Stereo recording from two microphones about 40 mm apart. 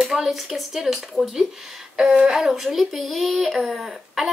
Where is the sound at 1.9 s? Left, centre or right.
Right.